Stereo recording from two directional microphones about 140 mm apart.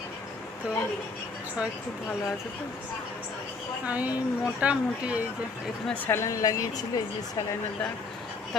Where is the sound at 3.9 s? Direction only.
10° right (ahead or behind).